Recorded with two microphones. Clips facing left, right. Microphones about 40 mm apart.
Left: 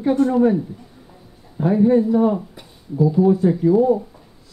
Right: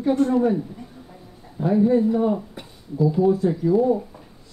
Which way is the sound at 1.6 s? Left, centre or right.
Left.